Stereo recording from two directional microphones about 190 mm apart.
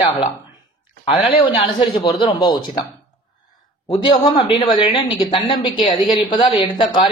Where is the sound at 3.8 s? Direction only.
25° left (ahead or behind).